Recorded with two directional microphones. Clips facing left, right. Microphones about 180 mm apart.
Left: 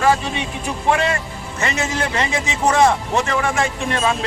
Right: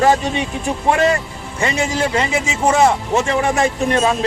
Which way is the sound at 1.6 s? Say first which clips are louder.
Right 4 dB; 30° right (ahead or behind).